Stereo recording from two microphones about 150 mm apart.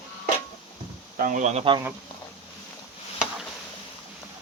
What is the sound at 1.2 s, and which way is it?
Speech, 60° right (ahead or behind).